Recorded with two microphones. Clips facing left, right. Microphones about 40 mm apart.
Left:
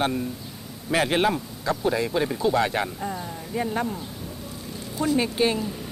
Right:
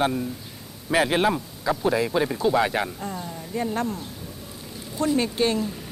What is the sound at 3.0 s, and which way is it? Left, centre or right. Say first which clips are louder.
Speech: left 1 dB; centre.